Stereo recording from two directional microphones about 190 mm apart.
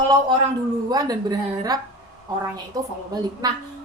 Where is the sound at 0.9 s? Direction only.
20° right (ahead or behind).